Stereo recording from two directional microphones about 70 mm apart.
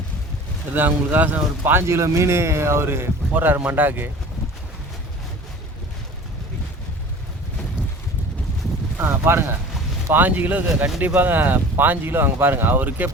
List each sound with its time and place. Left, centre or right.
0.7 s speech: right
9.0 s speech: right